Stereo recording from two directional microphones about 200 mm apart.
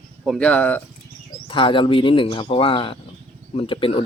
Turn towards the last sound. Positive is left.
turn(degrees=25)  # may be behind; listen again after turning